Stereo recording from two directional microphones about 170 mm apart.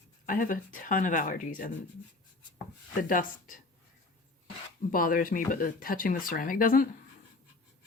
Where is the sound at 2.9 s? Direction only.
50° left (ahead or behind).